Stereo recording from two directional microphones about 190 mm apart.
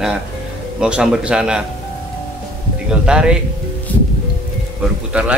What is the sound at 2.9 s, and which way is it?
Speech, 5° right (ahead or behind).